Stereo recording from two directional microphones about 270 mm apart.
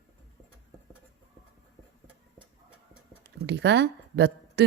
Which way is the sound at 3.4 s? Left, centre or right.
Right.